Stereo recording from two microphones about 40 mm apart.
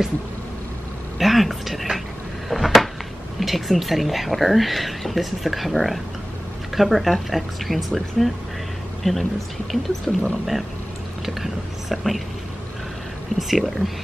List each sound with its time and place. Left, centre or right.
1.2 s speech: centre
2.5 s a sound: centre
3.3 s speech: centre
11.2 s whispering: centre
13.4 s speech: centre